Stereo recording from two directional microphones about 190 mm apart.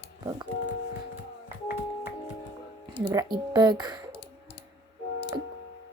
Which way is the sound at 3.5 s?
20° right (ahead or behind).